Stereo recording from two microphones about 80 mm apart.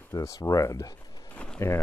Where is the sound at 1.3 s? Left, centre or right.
Centre.